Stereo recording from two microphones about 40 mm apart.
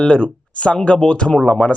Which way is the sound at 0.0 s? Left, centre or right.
Left.